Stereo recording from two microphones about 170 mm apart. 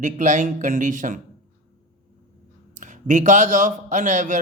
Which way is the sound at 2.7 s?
50° right (ahead or behind).